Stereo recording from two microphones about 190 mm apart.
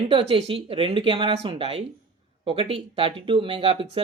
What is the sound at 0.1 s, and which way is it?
Speech, 30° right (ahead or behind).